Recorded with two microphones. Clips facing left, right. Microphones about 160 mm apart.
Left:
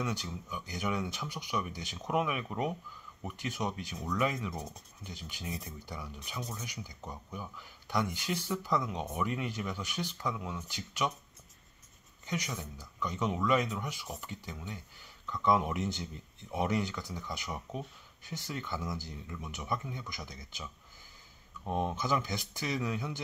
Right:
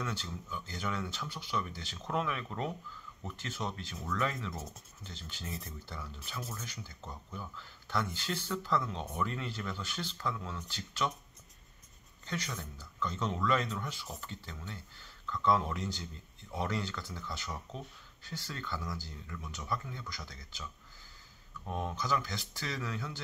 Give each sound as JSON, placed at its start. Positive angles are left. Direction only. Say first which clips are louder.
{"t": 0.0, "sound": "speech", "louder": "left 3 dB", "side_deg": 15}
{"t": 12.3, "sound": "speech", "louder": "left 2 dB", "side_deg": 10}